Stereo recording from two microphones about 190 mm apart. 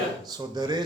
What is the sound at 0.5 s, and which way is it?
Speech, 20° right (ahead or behind).